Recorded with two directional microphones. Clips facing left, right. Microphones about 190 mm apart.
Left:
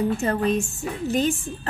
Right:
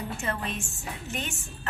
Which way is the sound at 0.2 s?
35° left (ahead or behind).